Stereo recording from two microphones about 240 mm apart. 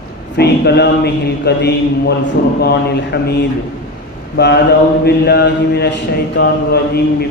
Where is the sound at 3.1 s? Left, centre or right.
Left.